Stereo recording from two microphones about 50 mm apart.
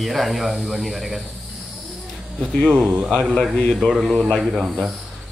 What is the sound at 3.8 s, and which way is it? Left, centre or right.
Speech, centre.